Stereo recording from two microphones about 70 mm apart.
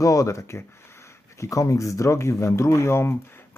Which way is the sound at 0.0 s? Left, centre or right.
Left.